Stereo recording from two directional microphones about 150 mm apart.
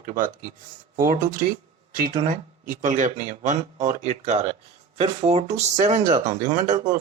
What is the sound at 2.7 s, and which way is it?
Speech, 60° right (ahead or behind).